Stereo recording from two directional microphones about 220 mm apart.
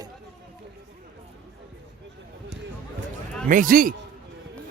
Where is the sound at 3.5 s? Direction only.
40° right (ahead or behind).